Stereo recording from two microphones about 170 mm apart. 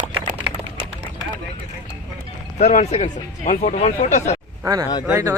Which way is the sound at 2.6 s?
45° left (ahead or behind).